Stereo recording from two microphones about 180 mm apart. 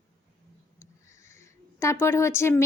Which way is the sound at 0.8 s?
15° left (ahead or behind).